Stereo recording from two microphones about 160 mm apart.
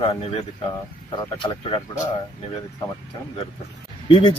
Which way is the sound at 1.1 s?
30° left (ahead or behind).